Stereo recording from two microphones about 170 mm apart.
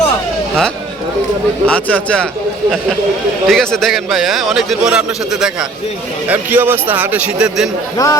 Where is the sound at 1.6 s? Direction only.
5° left (ahead or behind).